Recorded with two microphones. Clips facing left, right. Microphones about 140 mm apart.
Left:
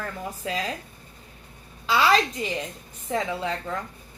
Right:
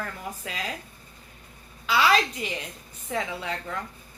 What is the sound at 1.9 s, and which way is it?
A woman's voice, 35° left (ahead or behind).